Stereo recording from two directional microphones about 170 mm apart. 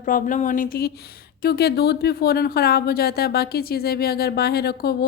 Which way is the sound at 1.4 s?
70° left (ahead or behind).